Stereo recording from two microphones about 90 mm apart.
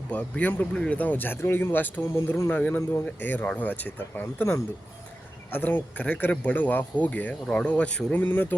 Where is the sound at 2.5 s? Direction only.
15° left (ahead or behind).